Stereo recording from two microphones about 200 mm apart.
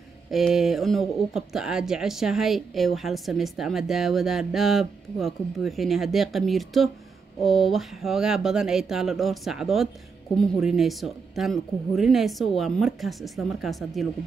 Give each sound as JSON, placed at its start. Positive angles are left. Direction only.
{"t": 0.3, "sound": "speech", "side_deg": 0}